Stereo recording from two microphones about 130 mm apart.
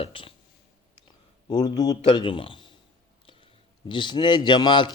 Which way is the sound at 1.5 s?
35° left (ahead or behind).